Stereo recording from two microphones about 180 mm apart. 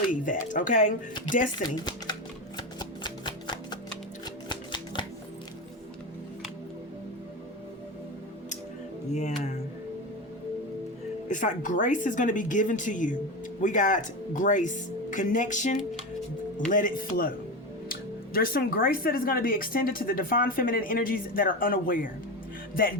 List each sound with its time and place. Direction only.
0.1 s speech: 45° left (ahead or behind)
1.7 s speech: 25° left (ahead or behind)
2.6 s music: 25° left (ahead or behind)
9.1 s speech: 40° left (ahead or behind)
11.3 s speech: 45° left (ahead or behind)
18.3 s speech: 55° left (ahead or behind)